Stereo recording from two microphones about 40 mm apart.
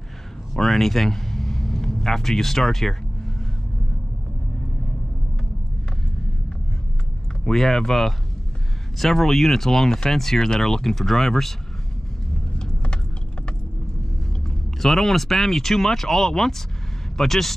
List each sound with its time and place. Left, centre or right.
0.6 s speech: centre
7.4 s speech: centre
12.5 s vehicle: left
14.8 s speech: centre